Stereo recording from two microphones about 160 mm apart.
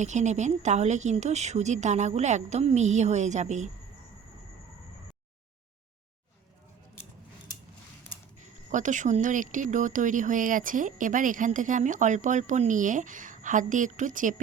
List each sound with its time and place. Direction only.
0.0 s speech: 45° right (ahead or behind)
8.7 s speech: 50° right (ahead or behind)